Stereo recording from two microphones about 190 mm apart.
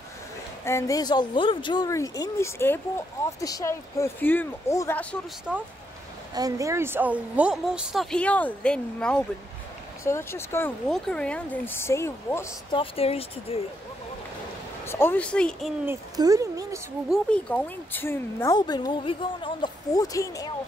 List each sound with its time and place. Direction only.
0.7 s speech: 15° left (ahead or behind)
6.3 s a woman's voice: 20° right (ahead or behind); by 12.4 s 15° left (ahead or behind)
12.7 s speech: 30° left (ahead or behind)
14.9 s speech: 10° left (ahead or behind)
15.8 s speech: 15° right (ahead or behind)
17.1 s speech: 5° left (ahead or behind)